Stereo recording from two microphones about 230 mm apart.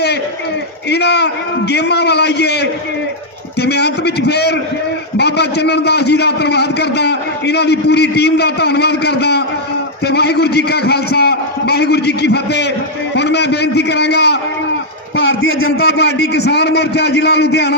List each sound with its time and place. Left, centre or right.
0.9 s a man's voice: left